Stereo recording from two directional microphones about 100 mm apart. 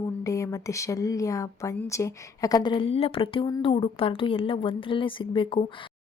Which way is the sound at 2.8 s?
80° left.